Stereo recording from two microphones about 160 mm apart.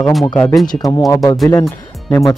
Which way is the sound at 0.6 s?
25° left (ahead or behind).